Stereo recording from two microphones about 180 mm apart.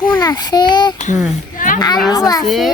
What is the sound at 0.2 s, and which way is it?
Speech, 20° left (ahead or behind).